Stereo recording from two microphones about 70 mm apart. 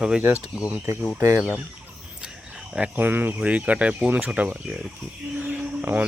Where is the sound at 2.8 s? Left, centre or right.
Right.